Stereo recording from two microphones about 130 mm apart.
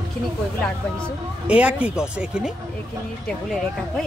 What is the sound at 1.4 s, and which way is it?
Speech, 10° right (ahead or behind).